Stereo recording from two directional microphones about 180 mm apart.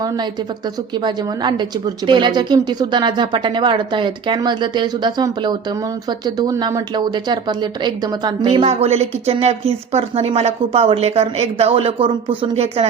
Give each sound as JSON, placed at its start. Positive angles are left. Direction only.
{"t": 0.9, "sound": "speech", "side_deg": -25}